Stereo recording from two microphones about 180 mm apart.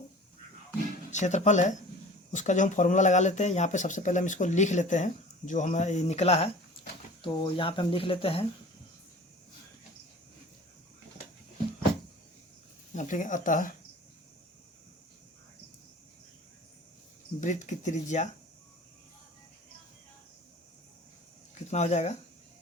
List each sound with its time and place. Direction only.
1.1 s speech: 40° left (ahead or behind)
12.9 s speech: 45° left (ahead or behind)
17.4 s speech: 45° left (ahead or behind)
21.7 s speech: 40° left (ahead or behind)